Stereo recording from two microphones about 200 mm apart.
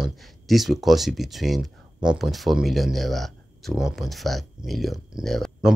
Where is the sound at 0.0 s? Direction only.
Centre (ahead or behind).